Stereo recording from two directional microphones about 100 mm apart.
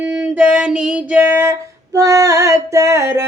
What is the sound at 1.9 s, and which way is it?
Music, 35° right (ahead or behind).